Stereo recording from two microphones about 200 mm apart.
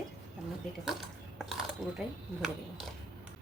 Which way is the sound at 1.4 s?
Centre (ahead or behind).